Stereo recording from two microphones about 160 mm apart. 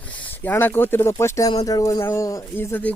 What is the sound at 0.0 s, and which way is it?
Speech, 10° left (ahead or behind).